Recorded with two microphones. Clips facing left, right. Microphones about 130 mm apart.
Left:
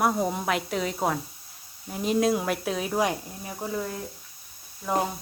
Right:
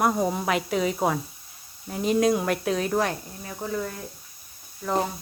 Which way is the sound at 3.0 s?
15° left (ahead or behind).